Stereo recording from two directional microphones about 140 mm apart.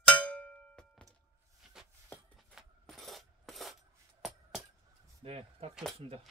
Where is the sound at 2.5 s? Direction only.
Centre (ahead or behind).